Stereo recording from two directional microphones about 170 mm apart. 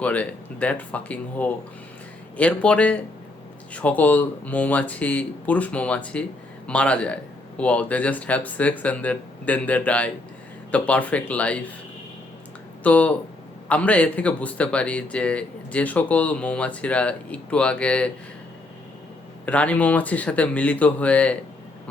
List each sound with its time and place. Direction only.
0.0 s a man's voice: 10° left (ahead or behind)
12.8 s a man's voice: 10° left (ahead or behind)
19.5 s a man's voice: 10° left (ahead or behind)